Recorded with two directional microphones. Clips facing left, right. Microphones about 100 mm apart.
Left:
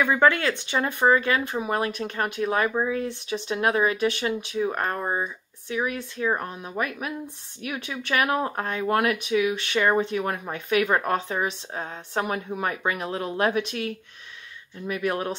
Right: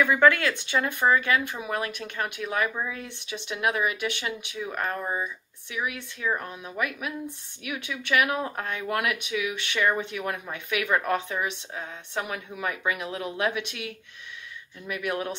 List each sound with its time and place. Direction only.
0.0 s speech: 25° left (ahead or behind)